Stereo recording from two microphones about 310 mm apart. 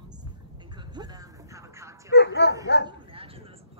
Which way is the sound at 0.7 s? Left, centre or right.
Centre.